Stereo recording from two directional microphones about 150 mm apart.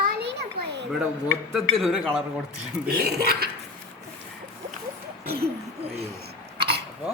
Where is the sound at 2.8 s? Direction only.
90° right.